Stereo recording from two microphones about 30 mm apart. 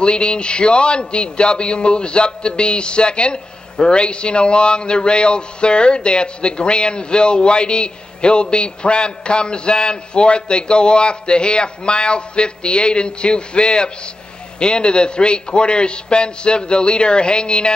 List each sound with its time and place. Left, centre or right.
0.0 s speech: left